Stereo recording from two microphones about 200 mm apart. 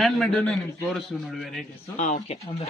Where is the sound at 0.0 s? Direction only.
Centre (ahead or behind).